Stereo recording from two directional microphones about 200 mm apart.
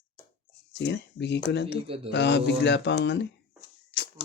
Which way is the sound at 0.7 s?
60° left (ahead or behind).